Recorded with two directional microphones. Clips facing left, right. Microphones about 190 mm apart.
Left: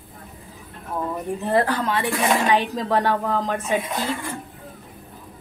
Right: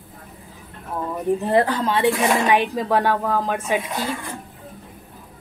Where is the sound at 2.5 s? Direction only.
10° right (ahead or behind).